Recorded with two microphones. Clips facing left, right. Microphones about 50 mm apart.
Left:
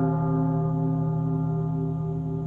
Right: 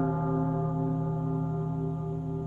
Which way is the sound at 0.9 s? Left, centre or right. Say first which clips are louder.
Left 4 dB; left.